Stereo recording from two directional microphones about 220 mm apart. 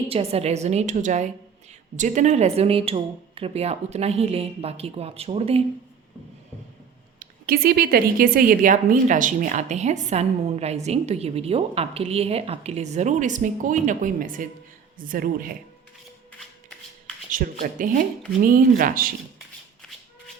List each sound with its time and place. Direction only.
0.1 s speech: 25° right (ahead or behind)
7.2 s a woman's voice: 40° right (ahead or behind)
17.2 s a woman's voice: 40° right (ahead or behind)